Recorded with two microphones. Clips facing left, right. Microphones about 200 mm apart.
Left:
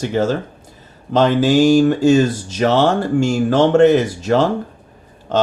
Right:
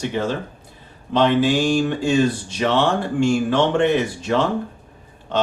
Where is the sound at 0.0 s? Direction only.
40° left (ahead or behind).